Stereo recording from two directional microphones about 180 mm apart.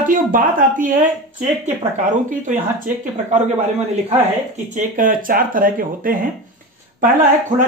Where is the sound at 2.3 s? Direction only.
45° right (ahead or behind).